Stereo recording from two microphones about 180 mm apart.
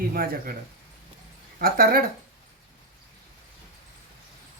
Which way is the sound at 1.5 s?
55° right (ahead or behind).